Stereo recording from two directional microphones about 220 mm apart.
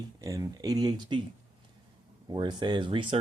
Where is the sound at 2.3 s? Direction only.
20° right (ahead or behind).